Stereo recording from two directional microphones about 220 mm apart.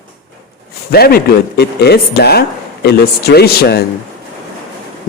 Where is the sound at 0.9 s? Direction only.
45° left (ahead or behind).